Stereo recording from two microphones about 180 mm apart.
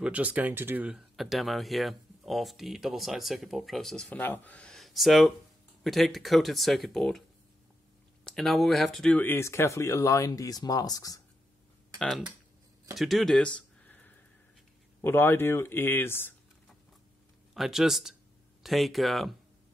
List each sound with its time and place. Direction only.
0.0 s speech: 5° right (ahead or behind); by 11.1 s 20° left (ahead or behind)
12.9 s speech: centre (ahead or behind)
17.6 s speech: centre (ahead or behind)